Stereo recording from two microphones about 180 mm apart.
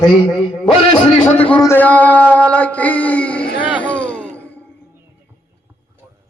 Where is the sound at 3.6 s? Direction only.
10° right (ahead or behind).